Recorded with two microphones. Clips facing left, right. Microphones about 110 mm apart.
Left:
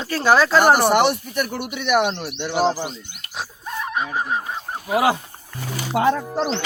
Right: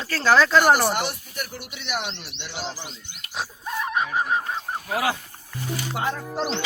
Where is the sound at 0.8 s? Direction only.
65° left (ahead or behind).